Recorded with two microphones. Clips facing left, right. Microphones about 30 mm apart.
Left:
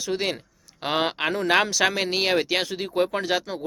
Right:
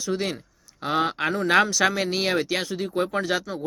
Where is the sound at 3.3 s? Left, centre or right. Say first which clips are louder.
Left 1 dB; centre.